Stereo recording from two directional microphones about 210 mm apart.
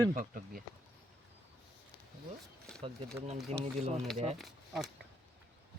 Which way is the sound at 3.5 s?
30° right (ahead or behind).